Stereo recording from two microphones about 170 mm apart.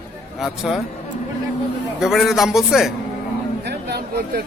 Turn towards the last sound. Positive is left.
turn(degrees=-70)  # may be behind; listen again after turning